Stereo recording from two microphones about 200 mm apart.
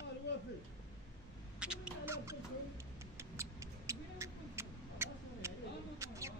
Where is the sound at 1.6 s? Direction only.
5° right (ahead or behind).